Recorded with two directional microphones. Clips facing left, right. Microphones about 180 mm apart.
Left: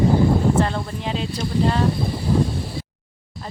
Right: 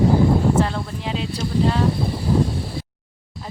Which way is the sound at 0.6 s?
Centre (ahead or behind).